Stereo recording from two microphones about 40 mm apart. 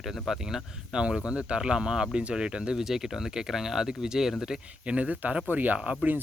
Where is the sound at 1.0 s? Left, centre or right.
Right.